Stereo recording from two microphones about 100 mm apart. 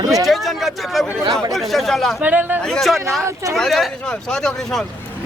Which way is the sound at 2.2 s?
15° right (ahead or behind).